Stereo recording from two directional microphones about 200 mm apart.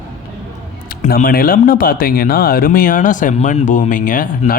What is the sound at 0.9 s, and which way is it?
Speech, 45° left (ahead or behind).